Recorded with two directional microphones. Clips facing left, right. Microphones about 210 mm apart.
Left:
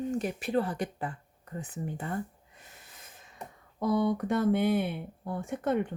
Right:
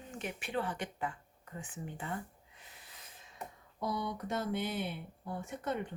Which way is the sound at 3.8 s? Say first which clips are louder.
Left 10 dB; 50° left (ahead or behind).